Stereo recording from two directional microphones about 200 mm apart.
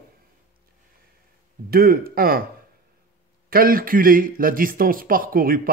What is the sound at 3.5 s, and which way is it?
Speech, 45° right (ahead or behind).